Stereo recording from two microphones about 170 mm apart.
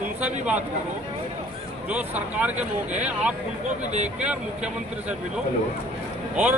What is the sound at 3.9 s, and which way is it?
Speech, 40° right (ahead or behind).